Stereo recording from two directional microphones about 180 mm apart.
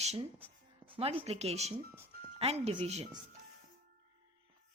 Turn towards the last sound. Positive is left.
turn(degrees=-35)  # may be behind; listen again after turning